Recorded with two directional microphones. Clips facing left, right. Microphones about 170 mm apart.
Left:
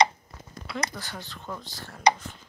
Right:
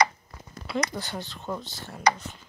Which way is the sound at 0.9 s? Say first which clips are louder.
Right 5 dB; 25° right (ahead or behind).